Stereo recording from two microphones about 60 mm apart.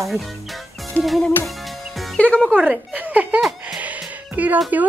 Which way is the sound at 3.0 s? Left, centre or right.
Right.